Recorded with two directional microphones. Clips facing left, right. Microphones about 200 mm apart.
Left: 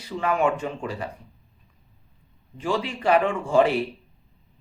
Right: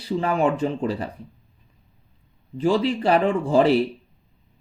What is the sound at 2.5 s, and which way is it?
A man's voice, 35° right (ahead or behind).